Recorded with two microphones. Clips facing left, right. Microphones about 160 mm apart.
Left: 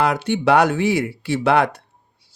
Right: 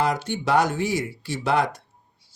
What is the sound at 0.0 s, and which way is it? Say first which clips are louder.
Speech: left 5 dB; 65° left (ahead or behind).